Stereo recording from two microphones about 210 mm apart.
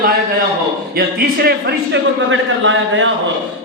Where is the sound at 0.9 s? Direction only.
50° right (ahead or behind).